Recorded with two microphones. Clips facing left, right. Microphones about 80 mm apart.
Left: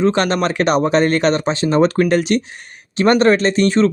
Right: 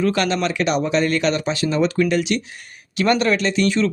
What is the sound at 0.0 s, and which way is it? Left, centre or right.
Speech, left.